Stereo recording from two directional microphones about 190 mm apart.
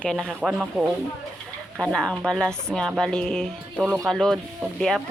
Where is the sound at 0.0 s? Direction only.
5° left (ahead or behind).